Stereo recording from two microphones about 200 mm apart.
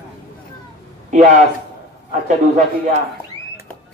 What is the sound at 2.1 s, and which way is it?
Speech, 40° right (ahead or behind).